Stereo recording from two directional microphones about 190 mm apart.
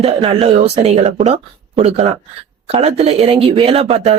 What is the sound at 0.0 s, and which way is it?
Speech, 30° right (ahead or behind).